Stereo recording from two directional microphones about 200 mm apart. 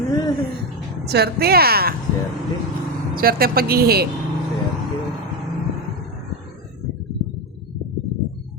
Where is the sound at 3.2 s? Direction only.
50° right (ahead or behind).